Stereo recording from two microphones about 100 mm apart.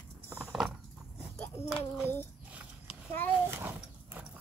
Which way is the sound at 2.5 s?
15° right (ahead or behind).